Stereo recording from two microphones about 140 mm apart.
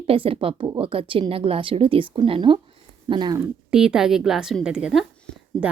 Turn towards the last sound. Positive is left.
turn(degrees=0)  # may be behind; listen again after turning